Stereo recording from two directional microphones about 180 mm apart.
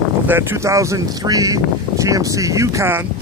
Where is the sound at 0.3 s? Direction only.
15° right (ahead or behind).